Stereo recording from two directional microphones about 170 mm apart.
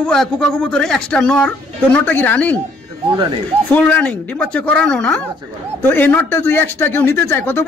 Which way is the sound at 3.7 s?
10° left (ahead or behind).